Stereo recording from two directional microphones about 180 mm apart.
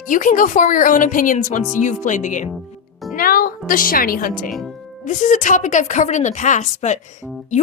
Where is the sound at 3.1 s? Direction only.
55° left (ahead or behind).